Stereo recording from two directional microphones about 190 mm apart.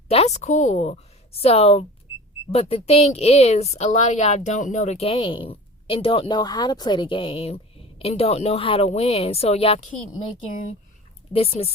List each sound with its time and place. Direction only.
0.1 s speech: 35° left (ahead or behind)
11.3 s speech: 30° left (ahead or behind)